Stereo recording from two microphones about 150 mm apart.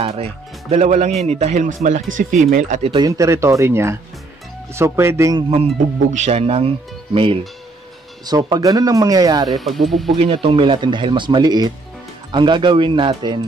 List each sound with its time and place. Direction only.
0.0 s speech: 40° right (ahead or behind)
3.0 s speech: 20° right (ahead or behind)
6.1 s speech: 45° right (ahead or behind)
8.3 s speech: 25° right (ahead or behind)
9.5 s speech: centre (ahead or behind)
10.0 s speech: 40° right (ahead or behind)